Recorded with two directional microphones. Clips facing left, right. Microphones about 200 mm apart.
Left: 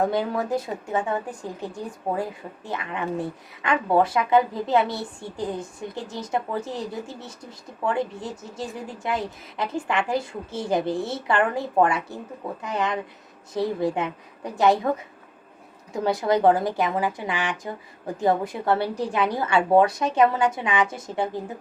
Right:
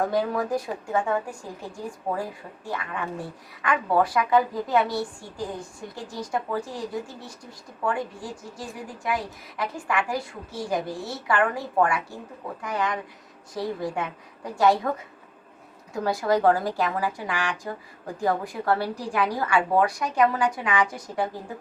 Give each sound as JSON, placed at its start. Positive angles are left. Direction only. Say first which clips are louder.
{"t": 0.0, "sound": "a woman's voice", "louder": "left 1 dB", "side_deg": 25}
{"t": 16.0, "sound": "a woman's voice", "louder": "left 2 dB", "side_deg": 20}